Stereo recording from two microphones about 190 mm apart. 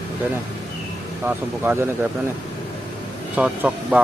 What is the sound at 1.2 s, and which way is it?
Speech, 10° right (ahead or behind).